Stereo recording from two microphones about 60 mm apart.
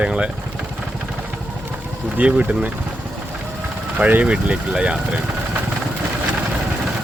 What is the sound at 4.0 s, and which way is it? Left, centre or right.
Speech, right.